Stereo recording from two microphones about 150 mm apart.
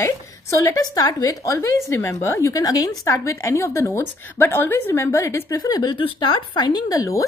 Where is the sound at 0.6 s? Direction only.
20° left (ahead or behind).